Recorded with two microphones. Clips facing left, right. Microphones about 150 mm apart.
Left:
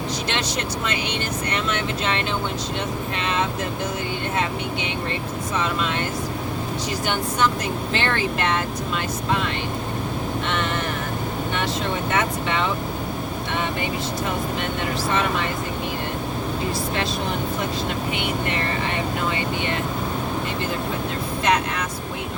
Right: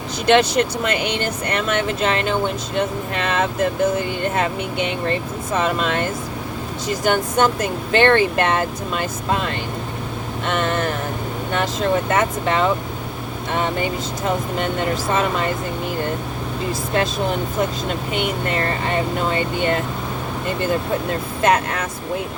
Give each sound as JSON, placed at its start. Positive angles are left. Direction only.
{"t": 0.3, "sound": "speech", "side_deg": -55}
{"t": 5.5, "sound": "speech", "side_deg": -50}
{"t": 7.0, "sound": "speech", "side_deg": -45}
{"t": 12.1, "sound": "speech", "side_deg": -45}
{"t": 21.4, "sound": "speech", "side_deg": -45}